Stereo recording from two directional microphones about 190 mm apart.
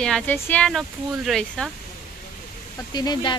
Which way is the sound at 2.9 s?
20° left (ahead or behind).